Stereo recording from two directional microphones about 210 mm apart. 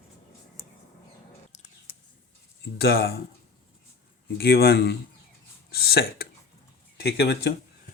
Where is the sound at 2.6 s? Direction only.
50° left (ahead or behind).